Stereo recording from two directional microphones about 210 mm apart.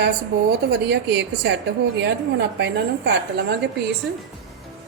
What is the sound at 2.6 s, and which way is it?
Speech, 55° right (ahead or behind).